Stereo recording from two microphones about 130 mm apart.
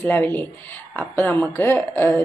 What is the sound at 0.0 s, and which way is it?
Speech, 15° left (ahead or behind).